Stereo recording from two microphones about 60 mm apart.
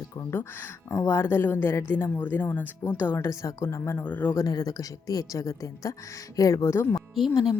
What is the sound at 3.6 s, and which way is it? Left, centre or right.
Speech, left.